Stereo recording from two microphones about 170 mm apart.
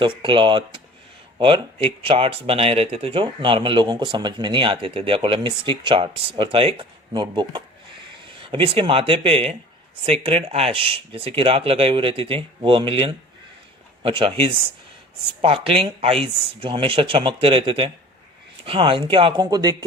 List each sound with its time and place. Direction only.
0.0 s speech: 30° right (ahead or behind)